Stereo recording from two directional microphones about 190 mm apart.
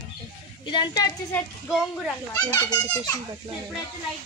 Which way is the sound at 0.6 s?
25° left (ahead or behind).